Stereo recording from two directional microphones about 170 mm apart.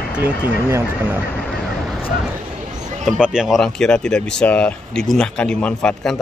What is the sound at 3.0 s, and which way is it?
Speech, 5° right (ahead or behind).